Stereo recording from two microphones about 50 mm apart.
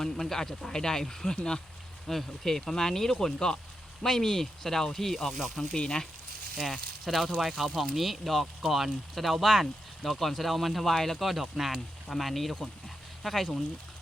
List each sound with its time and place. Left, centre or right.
0.0 s speech: centre
5.7 s speech: centre
6.6 s speech: centre